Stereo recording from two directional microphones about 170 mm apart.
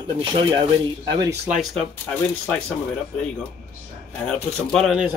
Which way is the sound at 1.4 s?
Centre (ahead or behind).